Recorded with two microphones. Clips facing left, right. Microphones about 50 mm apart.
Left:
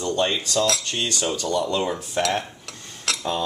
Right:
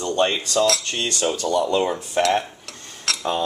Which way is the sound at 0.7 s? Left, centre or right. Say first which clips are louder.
Right 2 dB; centre.